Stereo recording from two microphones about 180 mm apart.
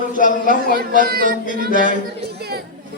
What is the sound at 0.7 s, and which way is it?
Speech, 50° right (ahead or behind).